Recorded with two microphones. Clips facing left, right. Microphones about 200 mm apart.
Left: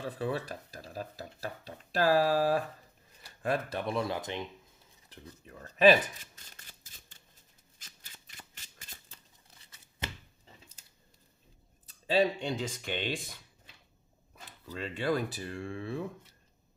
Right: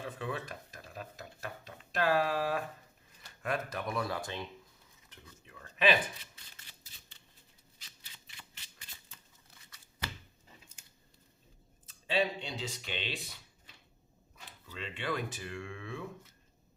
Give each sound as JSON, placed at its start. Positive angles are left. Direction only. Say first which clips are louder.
{"t": 0.0, "sound": "speech", "louder": "left 5 dB", "side_deg": 35}
{"t": 5.0, "sound": "a sound", "louder": "left 7 dB", "side_deg": 35}
{"t": 7.8, "sound": "shuffling cards", "louder": "left 3 dB", "side_deg": 45}
{"t": 9.6, "sound": "scissors", "louder": "left 2 dB", "side_deg": 25}
{"t": 11.9, "sound": "speech", "louder": "left 5 dB", "side_deg": 40}